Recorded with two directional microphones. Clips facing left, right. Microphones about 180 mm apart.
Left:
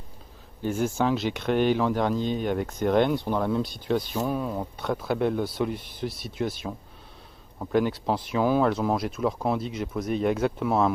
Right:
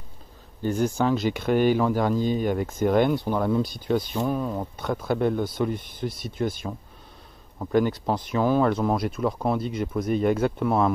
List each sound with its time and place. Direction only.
0.6 s speech: centre (ahead or behind)